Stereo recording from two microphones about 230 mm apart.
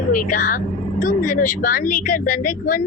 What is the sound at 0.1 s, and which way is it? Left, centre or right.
Speech, left.